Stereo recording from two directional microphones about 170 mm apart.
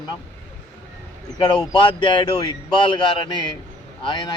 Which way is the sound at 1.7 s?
30° left (ahead or behind).